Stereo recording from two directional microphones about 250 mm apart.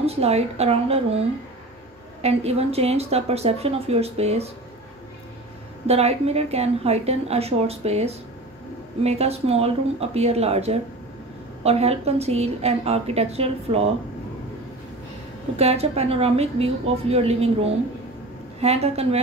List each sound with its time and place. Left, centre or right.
0.0 s a woman's voice: right
2.2 s a woman's voice: right
5.9 s a woman's voice: right
15.5 s a woman's voice: right